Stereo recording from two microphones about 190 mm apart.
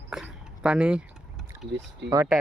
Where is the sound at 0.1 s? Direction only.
5° right (ahead or behind).